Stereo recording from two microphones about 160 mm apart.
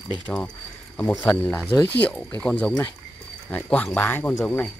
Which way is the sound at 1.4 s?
10° left (ahead or behind).